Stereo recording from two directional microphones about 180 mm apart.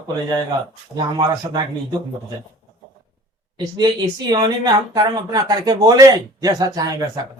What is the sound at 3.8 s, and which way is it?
Speech, 20° right (ahead or behind).